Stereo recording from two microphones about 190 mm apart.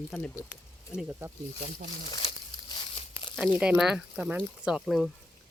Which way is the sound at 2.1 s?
25° left (ahead or behind).